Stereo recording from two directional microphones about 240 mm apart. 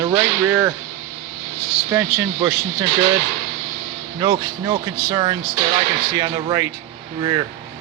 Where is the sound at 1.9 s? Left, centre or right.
Centre.